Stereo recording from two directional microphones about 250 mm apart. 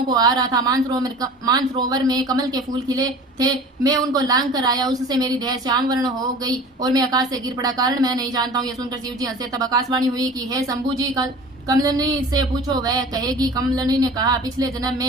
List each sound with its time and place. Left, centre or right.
0.1 s speech: centre